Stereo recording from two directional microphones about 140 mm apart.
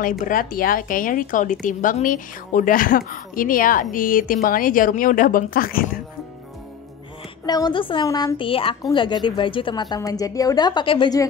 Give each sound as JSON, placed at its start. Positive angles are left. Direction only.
{"t": 0.2, "sound": "speech", "side_deg": 85}
{"t": 7.4, "sound": "a woman's voice", "side_deg": 30}